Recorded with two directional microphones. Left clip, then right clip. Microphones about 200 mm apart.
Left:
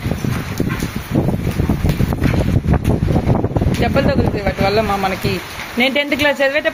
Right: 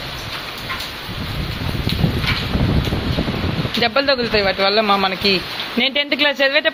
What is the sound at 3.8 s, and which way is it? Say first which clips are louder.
A man's voice: right 1 dB; centre (ahead or behind).